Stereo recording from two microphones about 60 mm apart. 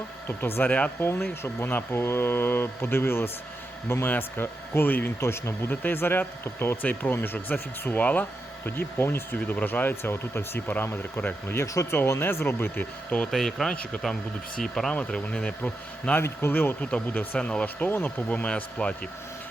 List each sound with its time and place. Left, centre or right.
0.3 s speech: left
0.9 s speech: left
5.2 s speech: left
5.6 s speech: left
11.5 s speech: left
12.2 s speech: left
13.3 s speech: centre
15.1 s speech: left
16.1 s speech: left
16.5 s speech: left
17.8 s speech: left